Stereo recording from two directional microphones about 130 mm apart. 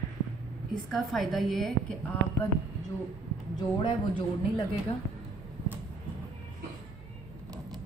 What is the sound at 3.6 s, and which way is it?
Speech, 35° left (ahead or behind).